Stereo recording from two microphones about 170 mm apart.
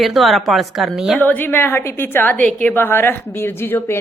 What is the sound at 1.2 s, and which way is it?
A woman's voice, 10° left (ahead or behind).